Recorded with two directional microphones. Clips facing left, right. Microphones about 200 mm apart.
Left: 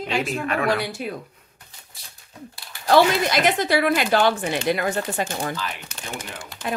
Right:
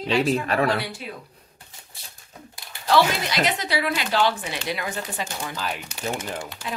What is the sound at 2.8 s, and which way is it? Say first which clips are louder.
Speech: left 4 dB; 50° left (ahead or behind).